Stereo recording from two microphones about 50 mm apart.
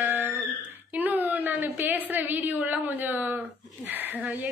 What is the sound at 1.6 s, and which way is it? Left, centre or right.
A woman's voice, right.